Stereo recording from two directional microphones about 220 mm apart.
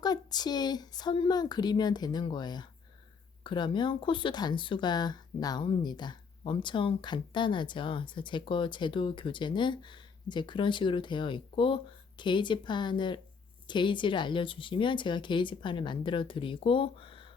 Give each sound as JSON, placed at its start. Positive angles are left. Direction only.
{"t": 0.0, "sound": "speech", "side_deg": 20}